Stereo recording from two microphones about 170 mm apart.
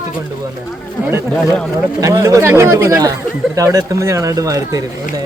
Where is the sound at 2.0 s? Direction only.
20° right (ahead or behind).